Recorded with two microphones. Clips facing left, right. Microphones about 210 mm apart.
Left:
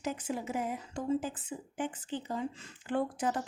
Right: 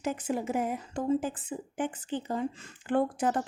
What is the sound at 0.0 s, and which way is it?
A woman's voice, 50° right (ahead or behind).